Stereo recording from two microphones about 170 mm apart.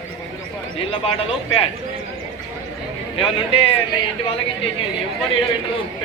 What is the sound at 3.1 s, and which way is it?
Speech, 35° left (ahead or behind).